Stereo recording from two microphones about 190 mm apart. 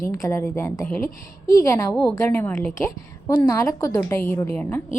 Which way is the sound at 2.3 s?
10° left (ahead or behind).